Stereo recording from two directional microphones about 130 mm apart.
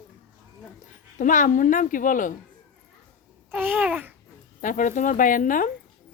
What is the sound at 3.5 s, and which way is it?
Babbling, 15° right (ahead or behind).